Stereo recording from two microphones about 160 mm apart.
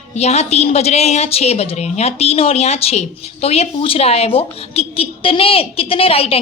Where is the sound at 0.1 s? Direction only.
45° left (ahead or behind).